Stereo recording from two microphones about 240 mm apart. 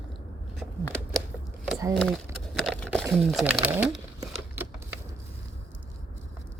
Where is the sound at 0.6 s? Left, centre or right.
Centre.